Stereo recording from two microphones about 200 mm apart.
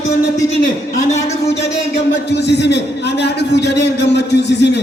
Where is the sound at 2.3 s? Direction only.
60° left (ahead or behind).